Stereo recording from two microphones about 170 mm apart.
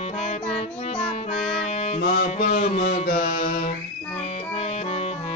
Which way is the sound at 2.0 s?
60° left (ahead or behind).